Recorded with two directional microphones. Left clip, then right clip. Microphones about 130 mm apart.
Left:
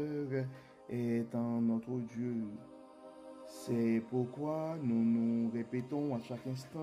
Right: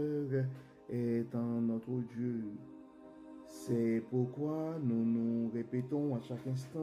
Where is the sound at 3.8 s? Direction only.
65° left (ahead or behind).